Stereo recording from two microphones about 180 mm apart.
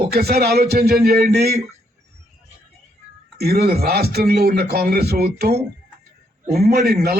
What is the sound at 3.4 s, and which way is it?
A man's voice, 60° right (ahead or behind).